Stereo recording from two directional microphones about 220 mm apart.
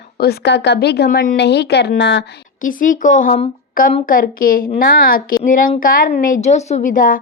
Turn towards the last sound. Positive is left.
turn(degrees=35)  # may be behind; listen again after turning